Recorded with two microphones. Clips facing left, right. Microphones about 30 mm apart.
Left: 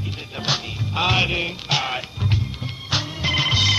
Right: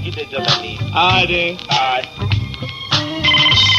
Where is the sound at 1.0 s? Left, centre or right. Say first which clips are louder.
Right 7 dB; right.